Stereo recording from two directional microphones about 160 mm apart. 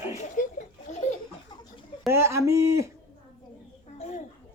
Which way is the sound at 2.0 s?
15° right (ahead or behind).